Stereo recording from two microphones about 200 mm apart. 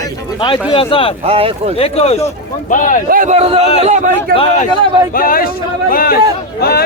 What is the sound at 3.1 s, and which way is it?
Speech, 40° right (ahead or behind).